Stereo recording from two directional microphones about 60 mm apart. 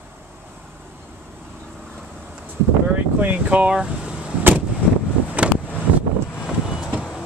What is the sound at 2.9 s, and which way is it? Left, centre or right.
Vehicle, right.